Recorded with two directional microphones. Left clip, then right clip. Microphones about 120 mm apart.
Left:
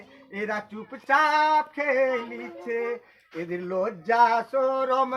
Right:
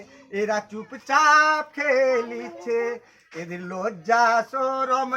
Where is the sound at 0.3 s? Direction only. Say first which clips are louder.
Right 5 dB; 30° right (ahead or behind).